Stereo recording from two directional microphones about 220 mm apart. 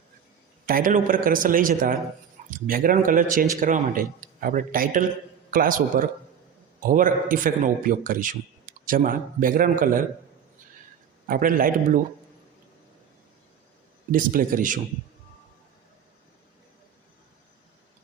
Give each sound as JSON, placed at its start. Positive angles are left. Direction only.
{"t": 0.6, "sound": "a man's voice", "side_deg": -40}
{"t": 11.3, "sound": "a man's voice", "side_deg": -40}
{"t": 14.1, "sound": "a man's voice", "side_deg": -40}